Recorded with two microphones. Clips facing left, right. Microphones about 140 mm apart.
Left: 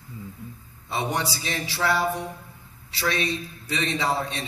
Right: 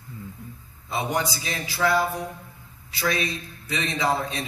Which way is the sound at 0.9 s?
35° left (ahead or behind).